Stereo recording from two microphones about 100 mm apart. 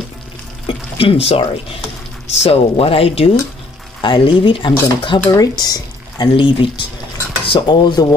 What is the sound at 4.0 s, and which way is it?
Speech, 50° left (ahead or behind).